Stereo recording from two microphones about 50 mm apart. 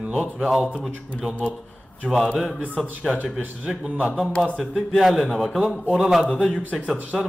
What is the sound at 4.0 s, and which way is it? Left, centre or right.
Speech, right.